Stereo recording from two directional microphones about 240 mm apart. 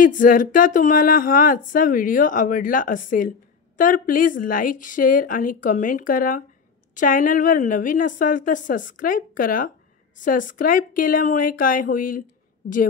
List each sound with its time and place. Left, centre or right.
0.0 s speech: left